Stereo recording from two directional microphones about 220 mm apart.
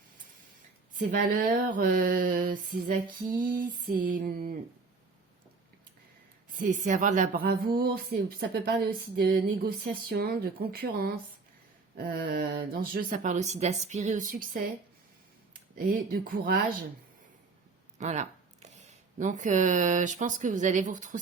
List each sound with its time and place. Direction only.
0.9 s speech: 35° right (ahead or behind)
6.5 s speech: 35° right (ahead or behind)
15.8 s speech: 40° right (ahead or behind)
17.9 s speech: 30° right (ahead or behind)